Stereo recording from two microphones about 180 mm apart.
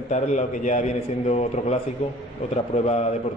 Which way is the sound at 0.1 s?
40° left (ahead or behind).